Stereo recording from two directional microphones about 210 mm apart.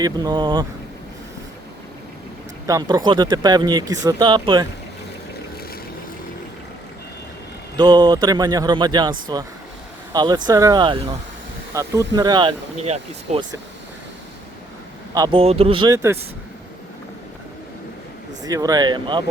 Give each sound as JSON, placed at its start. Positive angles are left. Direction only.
{"t": 0.0, "sound": "speech", "side_deg": -20}
{"t": 2.6, "sound": "speech", "side_deg": -20}
{"t": 7.8, "sound": "speech", "side_deg": -20}
{"t": 11.7, "sound": "speech", "side_deg": -15}
{"t": 15.1, "sound": "speech", "side_deg": -20}
{"t": 18.4, "sound": "speech", "side_deg": -15}